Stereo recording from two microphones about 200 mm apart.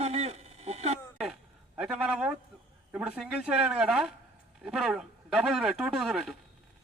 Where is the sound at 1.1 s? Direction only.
Centre (ahead or behind).